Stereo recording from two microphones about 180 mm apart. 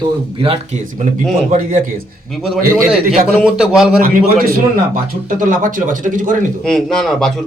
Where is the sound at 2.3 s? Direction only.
Centre (ahead or behind).